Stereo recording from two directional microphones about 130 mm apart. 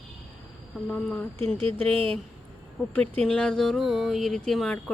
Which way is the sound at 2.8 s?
10° left (ahead or behind).